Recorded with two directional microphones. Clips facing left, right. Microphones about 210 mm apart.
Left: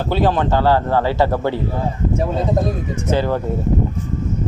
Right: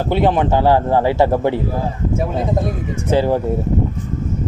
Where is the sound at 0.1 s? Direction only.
20° right (ahead or behind).